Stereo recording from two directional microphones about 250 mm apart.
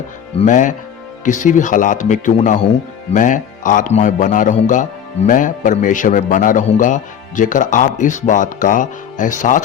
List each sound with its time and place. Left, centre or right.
0.3 s speech: left